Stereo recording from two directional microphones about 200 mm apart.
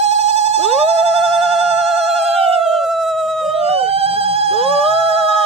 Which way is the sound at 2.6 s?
Centre (ahead or behind).